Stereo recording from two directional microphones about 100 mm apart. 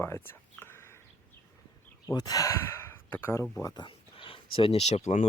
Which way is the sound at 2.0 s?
40° left (ahead or behind).